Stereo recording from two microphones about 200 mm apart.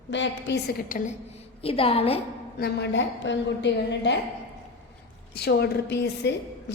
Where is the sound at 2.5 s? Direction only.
55° left (ahead or behind).